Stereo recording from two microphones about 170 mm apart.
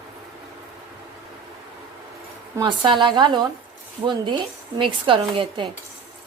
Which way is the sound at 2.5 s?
20° right (ahead or behind).